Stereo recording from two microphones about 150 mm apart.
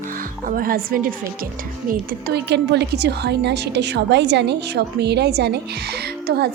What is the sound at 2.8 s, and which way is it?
A woman's voice, 90° right.